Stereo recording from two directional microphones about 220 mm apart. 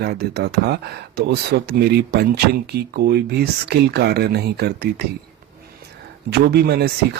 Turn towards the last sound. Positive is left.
turn(degrees=-45)  # may be behind; listen again after turning